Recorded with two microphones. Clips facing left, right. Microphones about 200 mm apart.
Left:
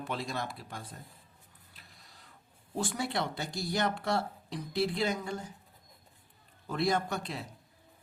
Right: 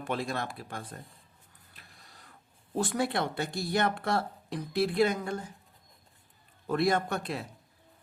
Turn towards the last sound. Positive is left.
turn(degrees=-55)  # may be behind; listen again after turning